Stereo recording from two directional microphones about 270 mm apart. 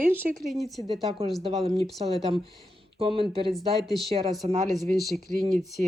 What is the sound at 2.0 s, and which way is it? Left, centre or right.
Speech, right.